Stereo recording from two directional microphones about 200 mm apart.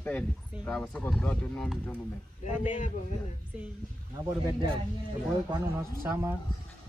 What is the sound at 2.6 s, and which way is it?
Speech, 40° left (ahead or behind).